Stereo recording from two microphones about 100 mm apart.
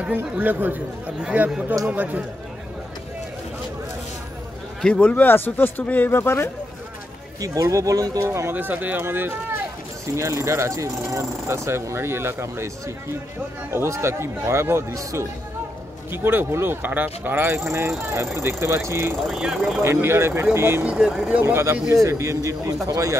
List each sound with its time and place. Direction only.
0.0 s speech: 15° right (ahead or behind)
4.8 s speech: 10° left (ahead or behind)
7.3 s speech: 35° right (ahead or behind)
8.3 s speech: 25° right (ahead or behind)
19.2 s speech: 5° right (ahead or behind)
19.8 s speech: 25° right (ahead or behind)
20.8 s speech: 10° right (ahead or behind)
21.3 s speech: 20° right (ahead or behind)